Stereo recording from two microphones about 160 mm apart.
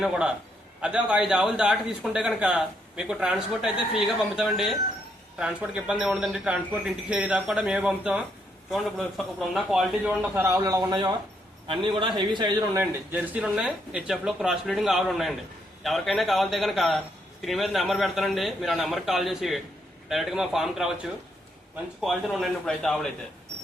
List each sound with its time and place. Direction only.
0.0 s a man's voice: 5° right (ahead or behind); by 12.8 s 25° right (ahead or behind)
12.8 s a man's voice: 10° right (ahead or behind)